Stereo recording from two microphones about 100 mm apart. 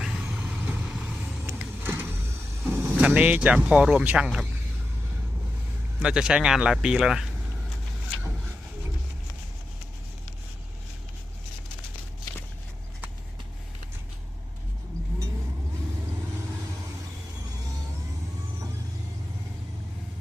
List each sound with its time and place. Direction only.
0.0 s vehicle: 10° right (ahead or behind)
3.1 s speech: 15° right (ahead or behind)
6.0 s speech: 10° right (ahead or behind)